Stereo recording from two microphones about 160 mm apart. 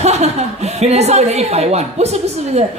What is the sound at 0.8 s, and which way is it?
A woman's voice, 45° right (ahead or behind).